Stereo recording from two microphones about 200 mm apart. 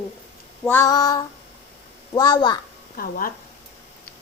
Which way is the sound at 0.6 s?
10° left (ahead or behind).